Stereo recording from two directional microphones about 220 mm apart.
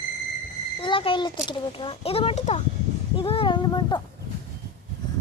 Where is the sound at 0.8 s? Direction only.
25° left (ahead or behind).